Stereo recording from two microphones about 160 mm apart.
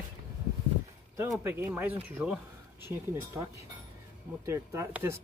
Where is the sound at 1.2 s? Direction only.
15° right (ahead or behind).